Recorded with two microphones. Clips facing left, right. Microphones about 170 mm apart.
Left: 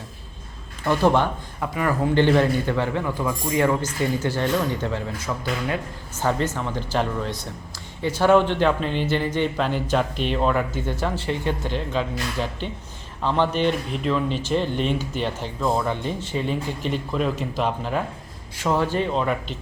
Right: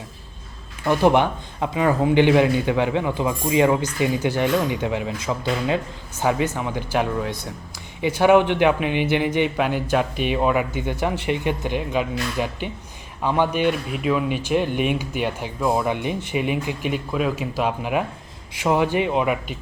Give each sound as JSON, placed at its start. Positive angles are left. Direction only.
{"t": 0.9, "sound": "a man's voice", "side_deg": -15}